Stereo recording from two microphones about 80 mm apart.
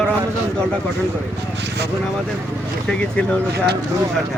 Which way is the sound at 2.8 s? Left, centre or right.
Centre.